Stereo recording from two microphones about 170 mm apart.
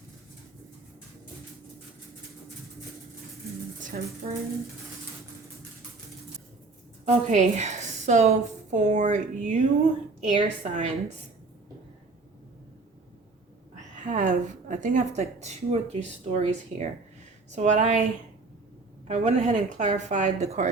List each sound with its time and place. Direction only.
3.8 s a woman's voice: 50° right (ahead or behind)
7.0 s a woman's voice: 45° right (ahead or behind)
13.7 s a woman's voice: 45° right (ahead or behind)